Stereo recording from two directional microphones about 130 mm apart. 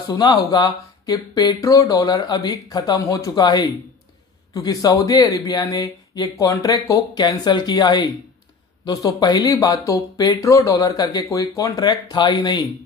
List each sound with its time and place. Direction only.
0.0 s speech: 30° left (ahead or behind)